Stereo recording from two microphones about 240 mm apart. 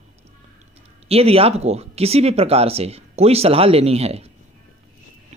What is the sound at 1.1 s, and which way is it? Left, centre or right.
Speech, right.